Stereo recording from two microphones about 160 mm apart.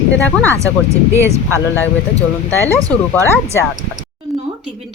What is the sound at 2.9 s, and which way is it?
Speech, 15° left (ahead or behind).